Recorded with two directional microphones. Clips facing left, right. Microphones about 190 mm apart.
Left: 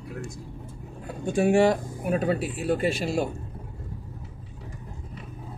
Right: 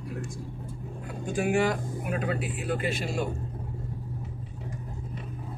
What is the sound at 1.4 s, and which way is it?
Speech, 30° left (ahead or behind).